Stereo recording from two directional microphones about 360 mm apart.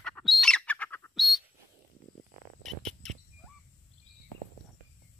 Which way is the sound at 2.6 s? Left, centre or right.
Centre.